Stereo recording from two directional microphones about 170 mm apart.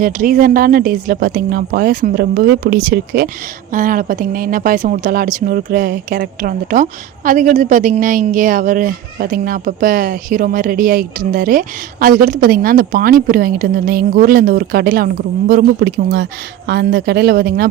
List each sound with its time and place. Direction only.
0.0 s a woman's voice: 55° right (ahead or behind)
16.6 s speech: 70° right (ahead or behind)